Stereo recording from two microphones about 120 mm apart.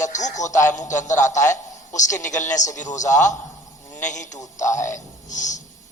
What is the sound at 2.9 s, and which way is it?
A man's voice, 90° left.